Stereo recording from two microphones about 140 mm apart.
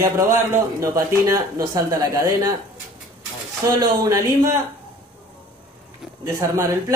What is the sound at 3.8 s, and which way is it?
Speech, 20° right (ahead or behind).